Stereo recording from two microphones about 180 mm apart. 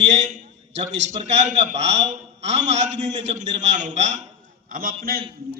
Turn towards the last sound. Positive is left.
turn(degrees=-55)  # may be behind; listen again after turning